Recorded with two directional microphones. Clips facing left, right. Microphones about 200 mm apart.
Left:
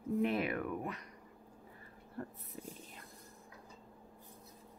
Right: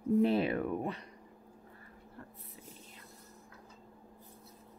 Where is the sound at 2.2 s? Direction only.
50° left (ahead or behind).